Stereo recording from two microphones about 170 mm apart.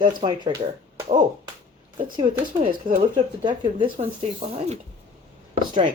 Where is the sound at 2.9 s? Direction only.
50° right (ahead or behind).